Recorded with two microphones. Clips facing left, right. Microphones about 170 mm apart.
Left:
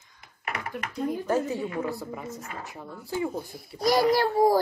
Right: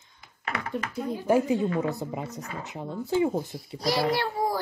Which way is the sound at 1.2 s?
15° right (ahead or behind).